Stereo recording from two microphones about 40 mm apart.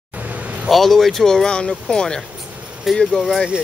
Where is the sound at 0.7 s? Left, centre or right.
Centre.